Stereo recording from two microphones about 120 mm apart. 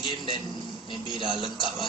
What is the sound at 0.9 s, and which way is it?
Speech, 45° left (ahead or behind).